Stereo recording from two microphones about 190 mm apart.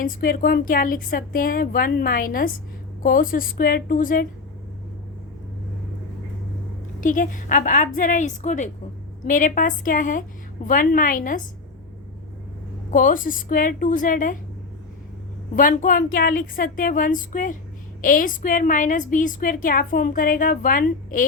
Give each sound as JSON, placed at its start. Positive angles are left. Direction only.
{"t": 0.0, "sound": "a woman's voice", "side_deg": 45}
{"t": 7.0, "sound": "a woman's voice", "side_deg": 45}
{"t": 12.9, "sound": "a woman's voice", "side_deg": 45}
{"t": 15.5, "sound": "a woman's voice", "side_deg": 45}